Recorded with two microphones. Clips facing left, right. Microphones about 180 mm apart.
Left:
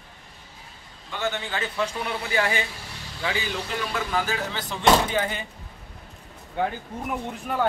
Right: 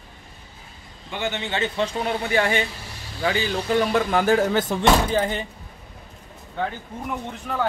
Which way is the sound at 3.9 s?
55° right (ahead or behind).